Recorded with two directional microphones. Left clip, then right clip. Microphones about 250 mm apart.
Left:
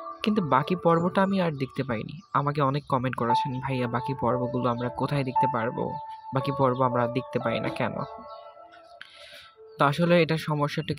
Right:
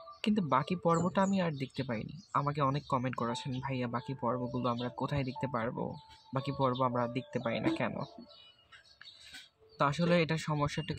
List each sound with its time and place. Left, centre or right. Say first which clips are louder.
0.2 s speech: left 7 dB; left
9.8 s speech: left 8 dB; left